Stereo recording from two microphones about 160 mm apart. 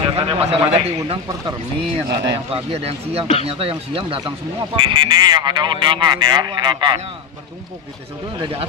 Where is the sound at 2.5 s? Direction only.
40° right (ahead or behind).